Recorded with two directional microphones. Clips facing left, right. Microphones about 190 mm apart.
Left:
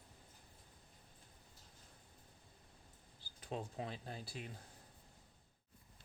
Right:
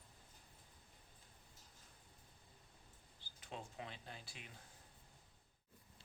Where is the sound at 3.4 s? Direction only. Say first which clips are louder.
Left 6 dB; 40° left (ahead or behind).